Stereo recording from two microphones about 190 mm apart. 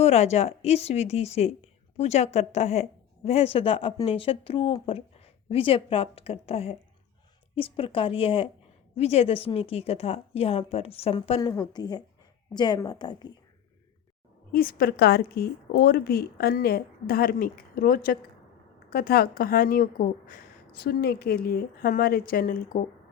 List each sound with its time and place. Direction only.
0.0 s a woman's voice: 35° left (ahead or behind)
14.5 s a woman's voice: 50° left (ahead or behind)